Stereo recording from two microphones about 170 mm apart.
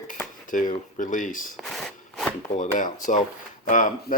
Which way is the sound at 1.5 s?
Centre (ahead or behind).